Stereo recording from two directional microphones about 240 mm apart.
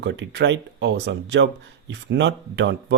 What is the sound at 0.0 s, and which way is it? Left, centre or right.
Speech, right.